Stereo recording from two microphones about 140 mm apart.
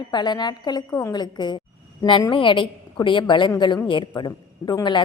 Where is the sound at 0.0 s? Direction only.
30° left (ahead or behind).